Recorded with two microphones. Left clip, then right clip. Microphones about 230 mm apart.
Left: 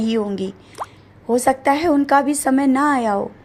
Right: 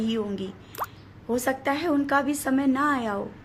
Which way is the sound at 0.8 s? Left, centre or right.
Centre.